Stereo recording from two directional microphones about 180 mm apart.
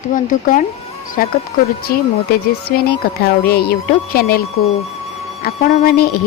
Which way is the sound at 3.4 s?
60° left (ahead or behind).